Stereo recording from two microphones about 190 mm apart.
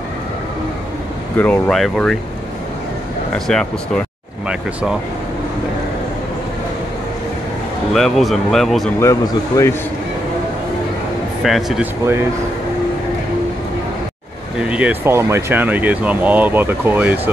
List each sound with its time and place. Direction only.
1.3 s speech: 5° left (ahead or behind)
3.3 s speech: 5° left (ahead or behind)
7.9 s speech: centre (ahead or behind)
9.0 s speech: 15° left (ahead or behind)
11.4 s speech: centre (ahead or behind)
14.6 s speech: 5° right (ahead or behind)